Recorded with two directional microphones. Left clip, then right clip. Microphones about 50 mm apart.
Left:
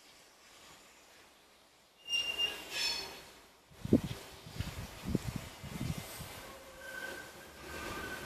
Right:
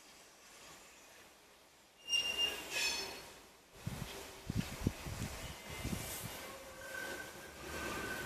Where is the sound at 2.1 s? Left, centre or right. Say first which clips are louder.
Left 1 dB; centre.